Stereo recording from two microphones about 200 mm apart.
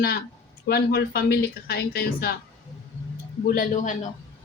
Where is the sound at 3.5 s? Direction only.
40° left (ahead or behind).